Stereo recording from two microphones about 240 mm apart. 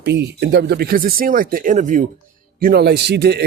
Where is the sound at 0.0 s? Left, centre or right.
Right.